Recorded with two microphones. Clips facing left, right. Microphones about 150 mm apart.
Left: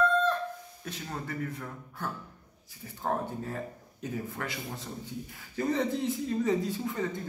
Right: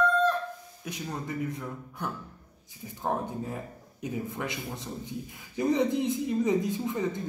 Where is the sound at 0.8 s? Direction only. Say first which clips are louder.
Right 3 dB; 15° right (ahead or behind).